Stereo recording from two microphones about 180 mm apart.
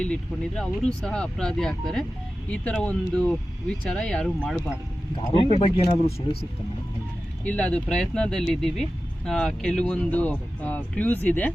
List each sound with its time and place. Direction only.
0.0 s speech: 5° left (ahead or behind)
5.3 s speech: 30° left (ahead or behind)
7.4 s speech: 5° left (ahead or behind)